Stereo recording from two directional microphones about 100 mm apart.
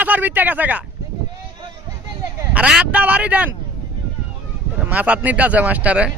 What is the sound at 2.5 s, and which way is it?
Speech, 10° right (ahead or behind).